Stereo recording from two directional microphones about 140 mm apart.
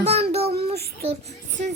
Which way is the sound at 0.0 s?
50° right (ahead or behind).